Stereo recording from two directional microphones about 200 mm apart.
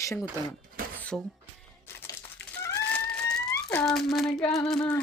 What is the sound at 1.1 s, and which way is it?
Speech, centre (ahead or behind).